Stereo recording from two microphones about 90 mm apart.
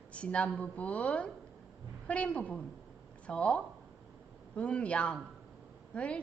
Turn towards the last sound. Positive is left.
turn(degrees=10)  # may be behind; listen again after turning